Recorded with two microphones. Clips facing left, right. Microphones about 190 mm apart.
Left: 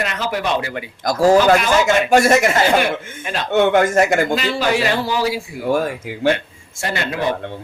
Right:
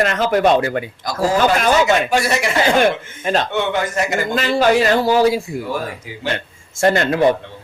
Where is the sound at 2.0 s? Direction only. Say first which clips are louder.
Left 5 dB; 45° left (ahead or behind).